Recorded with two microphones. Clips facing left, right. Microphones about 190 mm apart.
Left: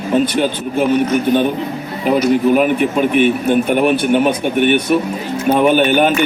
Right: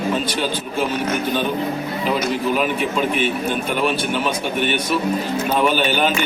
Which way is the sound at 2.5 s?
55° left (ahead or behind).